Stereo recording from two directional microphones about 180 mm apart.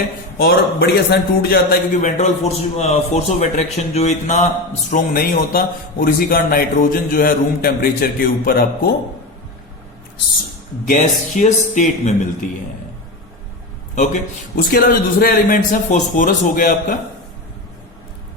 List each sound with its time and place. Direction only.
0.3 s a man's voice: 60° left (ahead or behind); by 4.4 s 40° left (ahead or behind)
4.9 s speech: 55° left (ahead or behind)
10.8 s speech: 45° left (ahead or behind)
13.9 s speech: 45° left (ahead or behind)